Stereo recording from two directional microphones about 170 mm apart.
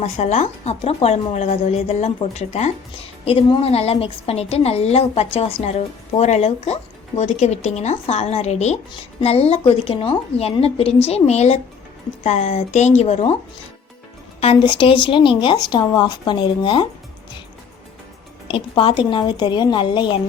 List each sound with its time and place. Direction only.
0.0 s a woman's voice: 40° left (ahead or behind)
14.4 s speech: 30° left (ahead or behind)
18.4 s speech: 30° left (ahead or behind)